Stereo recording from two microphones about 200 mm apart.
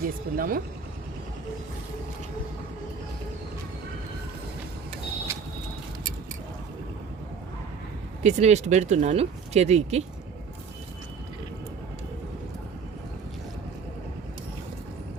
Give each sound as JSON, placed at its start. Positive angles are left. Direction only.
{"t": 0.0, "sound": "speech", "side_deg": -45}
{"t": 8.2, "sound": "speech", "side_deg": -35}